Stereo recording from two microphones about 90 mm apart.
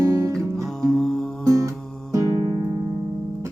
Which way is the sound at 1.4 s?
40° right (ahead or behind).